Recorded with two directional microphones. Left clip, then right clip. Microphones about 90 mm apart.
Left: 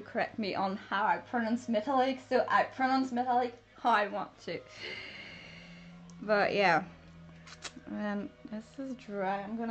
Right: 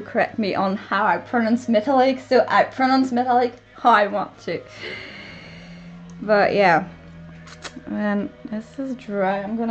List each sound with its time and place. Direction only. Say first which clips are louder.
0.0 s speech: right 12 dB; 10° right (ahead or behind)
1.1 s a woman's voice: right 12 dB; 30° right (ahead or behind)
3.8 s speech: right 12 dB; 15° right (ahead or behind)
4.8 s speech: right 9 dB; 5° left (ahead or behind)
6.2 s speech: right 11 dB; 5° left (ahead or behind)
7.6 s speech: right 12 dB; 5° right (ahead or behind)